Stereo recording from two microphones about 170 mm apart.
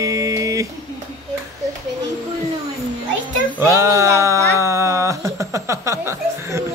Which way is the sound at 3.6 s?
15° right (ahead or behind).